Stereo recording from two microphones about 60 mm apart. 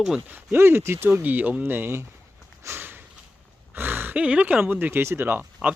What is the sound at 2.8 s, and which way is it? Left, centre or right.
Snort, right.